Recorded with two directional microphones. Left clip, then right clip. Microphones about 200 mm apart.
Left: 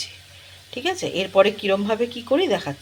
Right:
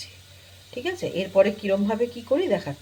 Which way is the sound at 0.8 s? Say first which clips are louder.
Left 4 dB; 5° left (ahead or behind).